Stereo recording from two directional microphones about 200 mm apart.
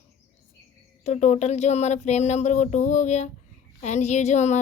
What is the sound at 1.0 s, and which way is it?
A woman's voice, 35° left (ahead or behind).